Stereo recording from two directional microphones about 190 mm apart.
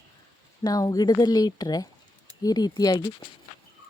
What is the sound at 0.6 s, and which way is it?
Speech, 20° left (ahead or behind).